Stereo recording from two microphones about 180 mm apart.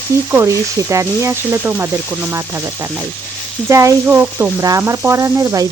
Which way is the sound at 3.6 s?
15° right (ahead or behind).